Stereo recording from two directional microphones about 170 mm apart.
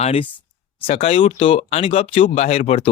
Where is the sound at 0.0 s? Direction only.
35° left (ahead or behind).